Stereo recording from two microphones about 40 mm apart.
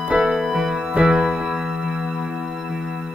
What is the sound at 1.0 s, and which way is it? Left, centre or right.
Music, right.